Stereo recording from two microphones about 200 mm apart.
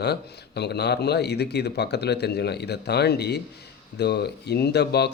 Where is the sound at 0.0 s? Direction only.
55° left (ahead or behind).